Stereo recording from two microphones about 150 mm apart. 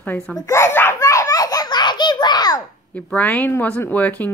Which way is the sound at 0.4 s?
20° left (ahead or behind).